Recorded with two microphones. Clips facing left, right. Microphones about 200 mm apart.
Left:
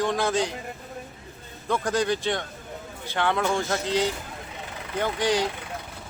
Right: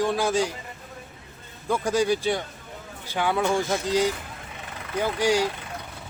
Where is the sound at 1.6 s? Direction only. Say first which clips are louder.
Right 2 dB; 10° right (ahead or behind).